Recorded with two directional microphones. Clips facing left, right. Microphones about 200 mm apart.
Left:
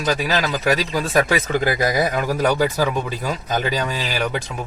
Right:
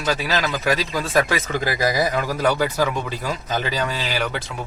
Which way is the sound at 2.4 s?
10° left (ahead or behind).